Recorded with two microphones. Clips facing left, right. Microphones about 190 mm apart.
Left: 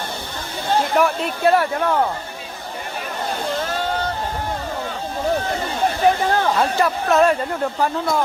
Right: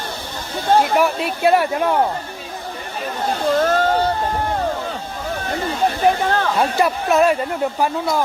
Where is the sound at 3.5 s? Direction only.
50° right (ahead or behind).